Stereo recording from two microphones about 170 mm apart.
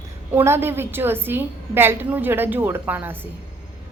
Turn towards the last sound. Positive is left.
turn(degrees=-10)  # may be behind; listen again after turning